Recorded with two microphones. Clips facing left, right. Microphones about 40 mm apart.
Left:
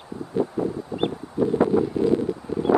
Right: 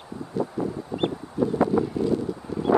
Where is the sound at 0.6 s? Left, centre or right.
Left.